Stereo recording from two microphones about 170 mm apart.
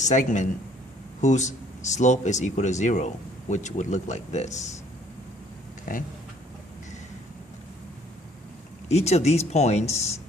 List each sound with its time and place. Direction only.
0.0 s speech: 45° left (ahead or behind)
5.9 s speech: 50° left (ahead or behind)
8.9 s speech: 40° left (ahead or behind)